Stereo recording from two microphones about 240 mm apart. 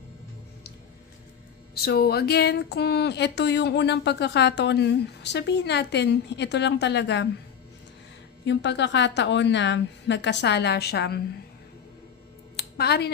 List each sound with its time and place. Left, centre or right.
1.7 s speech: left
8.4 s speech: left
12.5 s a sound: left